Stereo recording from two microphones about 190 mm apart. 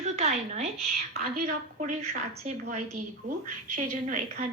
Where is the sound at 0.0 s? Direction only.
35° right (ahead or behind).